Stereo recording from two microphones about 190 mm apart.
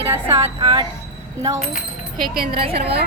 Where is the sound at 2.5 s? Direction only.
30° right (ahead or behind).